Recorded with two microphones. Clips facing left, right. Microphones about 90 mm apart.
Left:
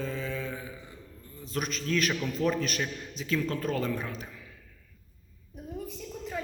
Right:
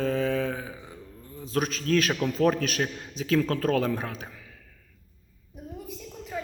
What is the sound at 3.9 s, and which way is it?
Speech, 50° right (ahead or behind).